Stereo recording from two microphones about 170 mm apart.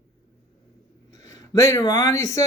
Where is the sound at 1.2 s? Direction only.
20° left (ahead or behind).